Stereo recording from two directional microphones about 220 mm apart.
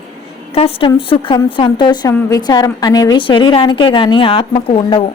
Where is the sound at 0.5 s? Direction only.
25° left (ahead or behind).